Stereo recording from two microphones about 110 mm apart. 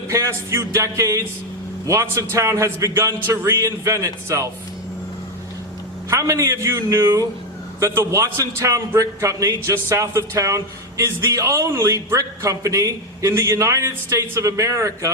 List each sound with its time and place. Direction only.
0.1 s a man's voice: 25° right (ahead or behind)
6.1 s a man's voice: 30° right (ahead or behind)